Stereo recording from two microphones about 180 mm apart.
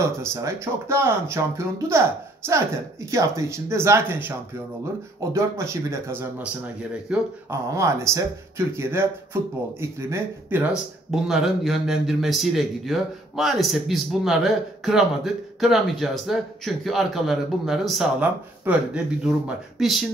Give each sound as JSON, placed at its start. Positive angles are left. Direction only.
{"t": 0.0, "sound": "speech", "side_deg": -15}
{"t": 5.3, "sound": "speech", "side_deg": -15}